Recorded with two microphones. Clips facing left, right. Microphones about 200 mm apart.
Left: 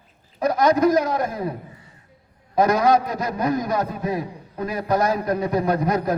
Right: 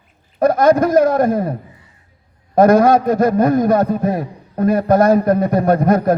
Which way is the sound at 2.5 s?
50° right (ahead or behind).